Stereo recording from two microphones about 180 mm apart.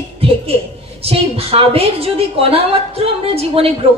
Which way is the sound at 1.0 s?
35° right (ahead or behind).